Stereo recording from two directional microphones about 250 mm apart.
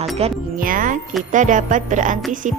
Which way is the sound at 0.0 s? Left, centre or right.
Right.